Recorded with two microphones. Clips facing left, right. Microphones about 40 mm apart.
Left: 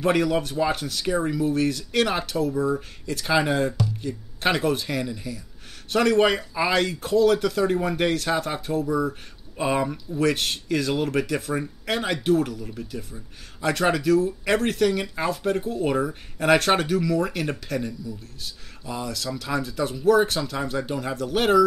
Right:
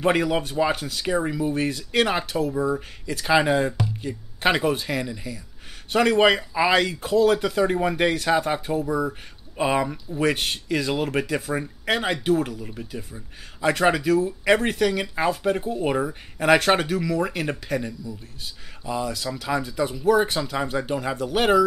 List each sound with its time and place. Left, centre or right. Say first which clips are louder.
0.0 s speech: even; centre
3.7 s speech: even; right
11.8 s speech: right 4 dB; right
19.0 s speech: right 2 dB; centre